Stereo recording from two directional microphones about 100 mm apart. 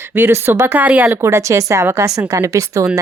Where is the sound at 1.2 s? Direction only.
30° right (ahead or behind).